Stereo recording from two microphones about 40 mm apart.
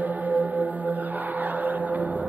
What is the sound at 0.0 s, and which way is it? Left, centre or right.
Music, right.